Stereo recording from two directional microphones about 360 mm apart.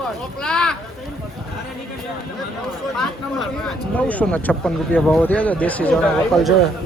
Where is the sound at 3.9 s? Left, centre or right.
Centre.